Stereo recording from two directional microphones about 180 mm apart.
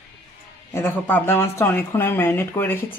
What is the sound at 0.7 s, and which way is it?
Speech, 10° left (ahead or behind).